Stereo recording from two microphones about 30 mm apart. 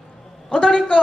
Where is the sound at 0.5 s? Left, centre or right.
Left.